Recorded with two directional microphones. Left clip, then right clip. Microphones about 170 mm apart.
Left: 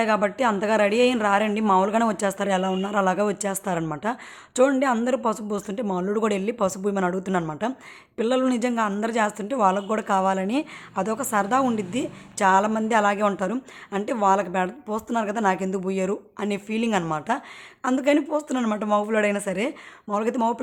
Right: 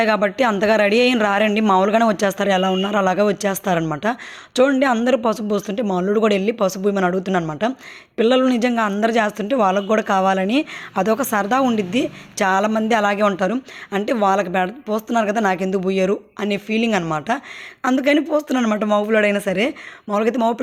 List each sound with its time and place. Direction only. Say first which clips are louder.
0.0 s a woman's voice: right 5 dB; 20° right (ahead or behind)